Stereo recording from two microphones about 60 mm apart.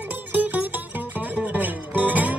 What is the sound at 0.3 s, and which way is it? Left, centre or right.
Music, right.